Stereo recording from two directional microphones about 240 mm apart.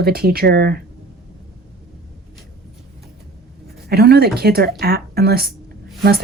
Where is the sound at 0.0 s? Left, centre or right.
Right.